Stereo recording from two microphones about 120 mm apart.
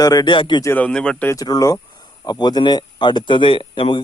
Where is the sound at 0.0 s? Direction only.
35° left (ahead or behind).